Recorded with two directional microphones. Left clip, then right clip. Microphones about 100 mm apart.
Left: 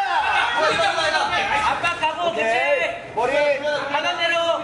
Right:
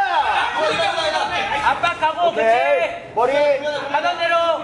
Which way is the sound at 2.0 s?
15° right (ahead or behind).